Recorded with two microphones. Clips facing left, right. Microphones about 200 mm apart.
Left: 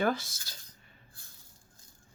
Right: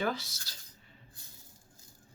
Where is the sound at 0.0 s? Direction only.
50° left (ahead or behind).